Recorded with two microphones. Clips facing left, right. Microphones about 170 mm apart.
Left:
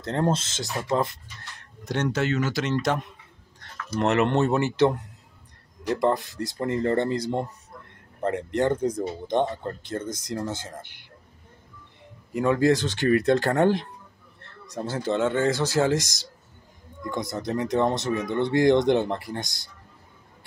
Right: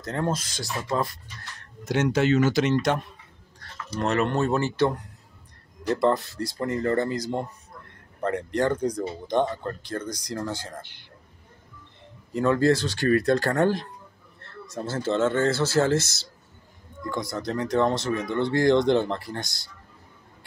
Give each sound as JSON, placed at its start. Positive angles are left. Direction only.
{"t": 0.0, "sound": "speech", "side_deg": 30}
{"t": 1.9, "sound": "speech", "side_deg": -10}
{"t": 2.7, "sound": "speech", "side_deg": 0}
{"t": 3.9, "sound": "speech", "side_deg": 20}
{"t": 12.3, "sound": "speech", "side_deg": 15}